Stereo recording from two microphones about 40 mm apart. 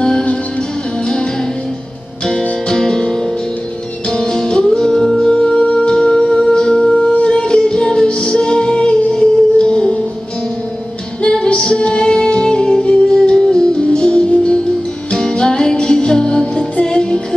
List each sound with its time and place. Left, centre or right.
2.7 s music: centre
5.3 s music: left
11.2 s music: left